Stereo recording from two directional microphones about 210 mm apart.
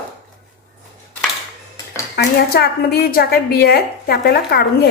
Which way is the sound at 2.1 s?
45° left (ahead or behind).